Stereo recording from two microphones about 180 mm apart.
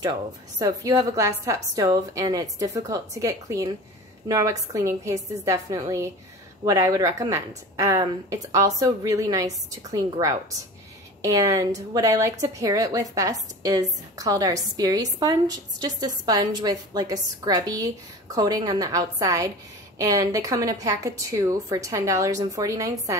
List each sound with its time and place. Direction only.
0.6 s a woman's voice: 20° right (ahead or behind)